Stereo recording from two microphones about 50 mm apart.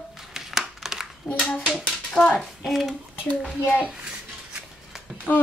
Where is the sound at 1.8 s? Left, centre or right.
Centre.